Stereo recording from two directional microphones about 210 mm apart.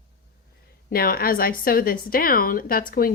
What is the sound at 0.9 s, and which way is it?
A woman's voice, 45° left (ahead or behind).